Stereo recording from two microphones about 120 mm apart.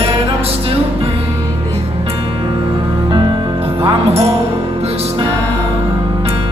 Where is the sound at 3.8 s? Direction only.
55° right (ahead or behind).